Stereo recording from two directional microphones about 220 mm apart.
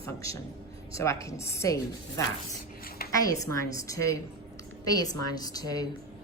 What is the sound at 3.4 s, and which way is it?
A woman's voice, 15° left (ahead or behind).